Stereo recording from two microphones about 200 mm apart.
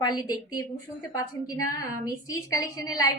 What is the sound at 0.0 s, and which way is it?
Speech, 20° left (ahead or behind).